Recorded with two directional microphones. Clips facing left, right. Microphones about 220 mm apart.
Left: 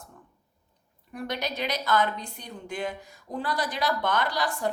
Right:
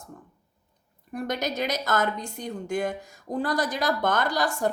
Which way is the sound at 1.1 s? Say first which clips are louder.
Right 3 dB; 45° right (ahead or behind).